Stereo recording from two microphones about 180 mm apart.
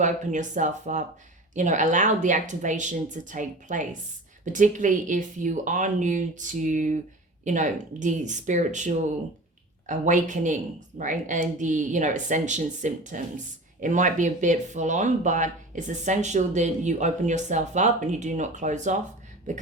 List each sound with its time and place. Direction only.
0.0 s speech: 45° right (ahead or behind)